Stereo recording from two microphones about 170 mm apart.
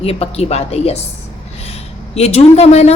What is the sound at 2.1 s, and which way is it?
Speech, 35° left (ahead or behind).